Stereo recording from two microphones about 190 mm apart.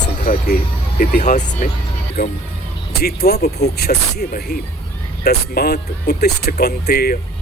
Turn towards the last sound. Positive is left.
turn(degrees=55)  # may be behind; listen again after turning